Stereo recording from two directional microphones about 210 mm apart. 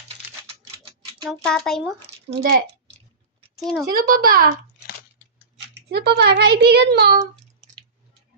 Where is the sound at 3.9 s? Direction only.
45° right (ahead or behind).